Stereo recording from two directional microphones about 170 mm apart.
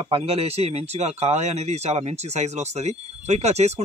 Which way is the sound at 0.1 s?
35° right (ahead or behind).